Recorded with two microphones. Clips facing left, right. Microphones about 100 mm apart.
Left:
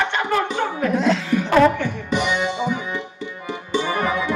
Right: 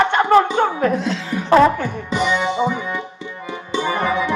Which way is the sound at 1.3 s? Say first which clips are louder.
Right 4 dB; 25° right (ahead or behind).